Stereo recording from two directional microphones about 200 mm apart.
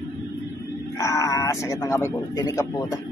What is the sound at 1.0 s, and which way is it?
Speech, 15° left (ahead or behind).